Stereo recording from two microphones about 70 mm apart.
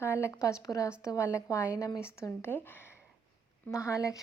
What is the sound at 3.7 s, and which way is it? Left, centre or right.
Speech, left.